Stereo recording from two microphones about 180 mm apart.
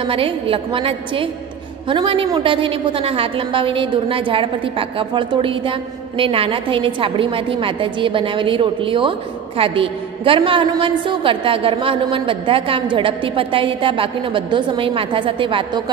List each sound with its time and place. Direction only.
0.0 s a woman's voice: 30° right (ahead or behind)